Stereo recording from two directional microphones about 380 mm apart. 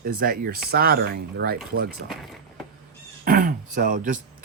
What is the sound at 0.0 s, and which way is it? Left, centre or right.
Speech, right.